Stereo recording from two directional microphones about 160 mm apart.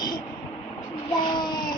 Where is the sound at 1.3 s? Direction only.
25° left (ahead or behind).